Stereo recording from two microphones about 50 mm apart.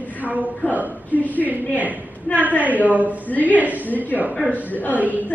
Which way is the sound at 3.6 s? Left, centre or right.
Right.